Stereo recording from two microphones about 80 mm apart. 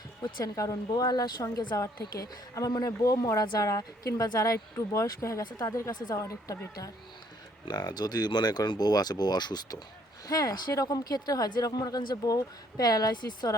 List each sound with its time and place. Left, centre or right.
0.4 s speech: left
0.9 s speech: left
5.6 s speech: left
5.9 s speech: left
6.1 s speech: left
7.6 s speech: left
10.2 s speech: left